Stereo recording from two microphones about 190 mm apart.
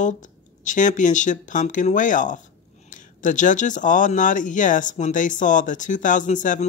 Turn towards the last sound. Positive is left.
turn(degrees=40)  # may be behind; listen again after turning